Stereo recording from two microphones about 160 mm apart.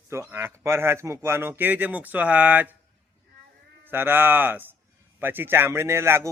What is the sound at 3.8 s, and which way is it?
A man's voice, 15° right (ahead or behind).